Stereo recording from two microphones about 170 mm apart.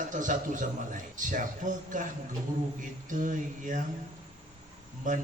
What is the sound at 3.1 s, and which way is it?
Speech, 50° right (ahead or behind).